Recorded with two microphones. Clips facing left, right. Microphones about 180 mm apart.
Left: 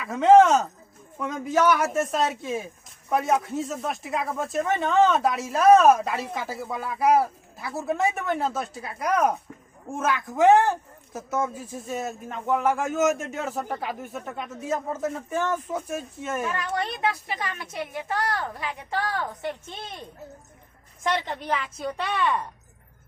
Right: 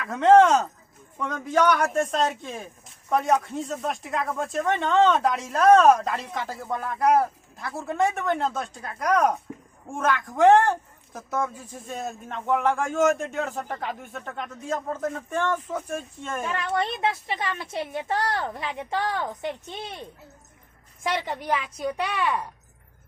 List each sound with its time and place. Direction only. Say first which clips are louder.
0.0 s speech: left 1 dB; 5° left (ahead or behind)
16.6 s speech: right 2 dB; 25° right (ahead or behind)
21.0 s a woman's voice: left 1 dB; 10° right (ahead or behind)